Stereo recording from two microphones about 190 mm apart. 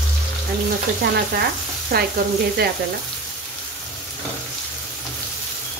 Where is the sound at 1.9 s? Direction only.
55° right (ahead or behind).